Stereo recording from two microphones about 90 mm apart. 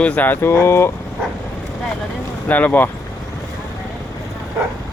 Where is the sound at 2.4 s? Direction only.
20° left (ahead or behind).